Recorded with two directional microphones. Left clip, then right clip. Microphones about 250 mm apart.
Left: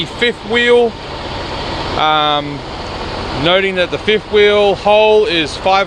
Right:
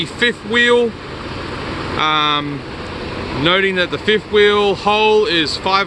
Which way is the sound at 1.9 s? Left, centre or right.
Centre.